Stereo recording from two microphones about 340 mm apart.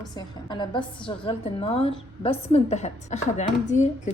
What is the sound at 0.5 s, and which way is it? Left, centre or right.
A woman's voice, centre.